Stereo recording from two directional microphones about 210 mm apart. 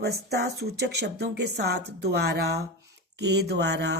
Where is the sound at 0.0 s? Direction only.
50° right (ahead or behind).